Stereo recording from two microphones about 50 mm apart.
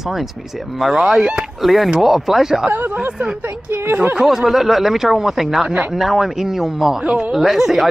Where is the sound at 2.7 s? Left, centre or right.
Right.